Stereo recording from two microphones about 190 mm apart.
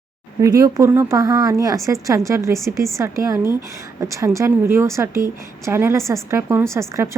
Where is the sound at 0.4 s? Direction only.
15° right (ahead or behind).